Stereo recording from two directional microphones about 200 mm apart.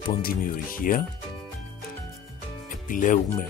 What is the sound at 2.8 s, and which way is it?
Speech, 40° left (ahead or behind).